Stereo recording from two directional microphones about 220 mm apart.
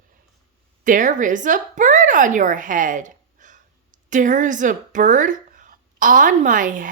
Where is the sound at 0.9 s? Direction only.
35° right (ahead or behind).